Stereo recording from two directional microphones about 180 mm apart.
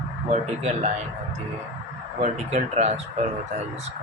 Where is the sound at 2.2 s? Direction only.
40° right (ahead or behind).